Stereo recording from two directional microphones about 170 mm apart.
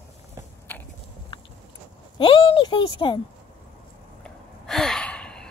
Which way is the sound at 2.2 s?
30° left (ahead or behind).